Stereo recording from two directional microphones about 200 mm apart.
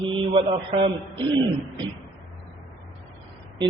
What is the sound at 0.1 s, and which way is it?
A man's voice, 25° right (ahead or behind).